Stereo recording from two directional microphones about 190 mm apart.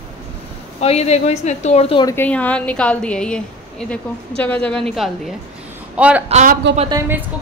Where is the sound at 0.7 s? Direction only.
35° left (ahead or behind).